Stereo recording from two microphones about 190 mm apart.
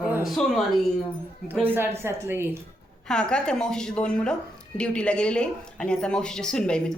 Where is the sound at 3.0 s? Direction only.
5° left (ahead or behind).